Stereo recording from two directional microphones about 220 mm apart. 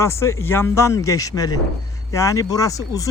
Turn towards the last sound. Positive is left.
turn(degrees=15)  # may be behind; listen again after turning